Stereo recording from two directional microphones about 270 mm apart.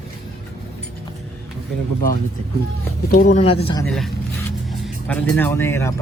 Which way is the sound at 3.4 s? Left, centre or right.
Left.